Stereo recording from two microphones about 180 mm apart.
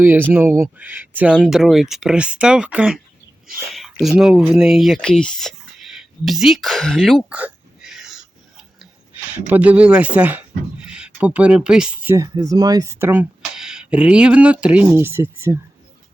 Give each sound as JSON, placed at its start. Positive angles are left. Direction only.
{"t": 0.0, "sound": "speech", "side_deg": -10}
{"t": 3.7, "sound": "a sound", "side_deg": 0}
{"t": 9.3, "sound": "speech", "side_deg": -10}
{"t": 12.1, "sound": "speech", "side_deg": -20}